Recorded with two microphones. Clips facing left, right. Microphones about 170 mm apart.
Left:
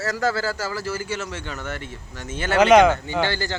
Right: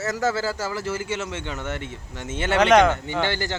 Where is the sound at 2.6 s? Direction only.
Centre (ahead or behind).